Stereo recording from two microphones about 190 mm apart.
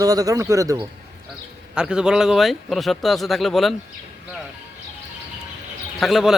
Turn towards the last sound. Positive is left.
turn(degrees=0)  # may be behind; listen again after turning